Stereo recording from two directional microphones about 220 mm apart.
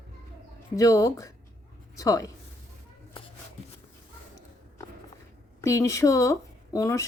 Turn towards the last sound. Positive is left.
turn(degrees=15)  # may be behind; listen again after turning